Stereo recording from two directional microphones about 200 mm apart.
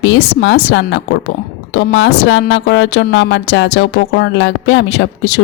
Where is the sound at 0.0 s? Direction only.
65° left (ahead or behind).